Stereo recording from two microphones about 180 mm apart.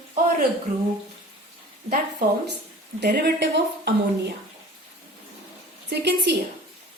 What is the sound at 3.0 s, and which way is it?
Speech, 70° right (ahead or behind).